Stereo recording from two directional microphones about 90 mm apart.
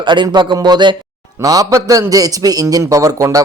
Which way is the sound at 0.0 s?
60° right (ahead or behind).